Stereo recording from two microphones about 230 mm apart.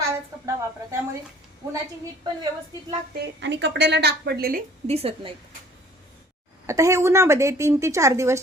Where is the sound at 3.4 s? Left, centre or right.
Right.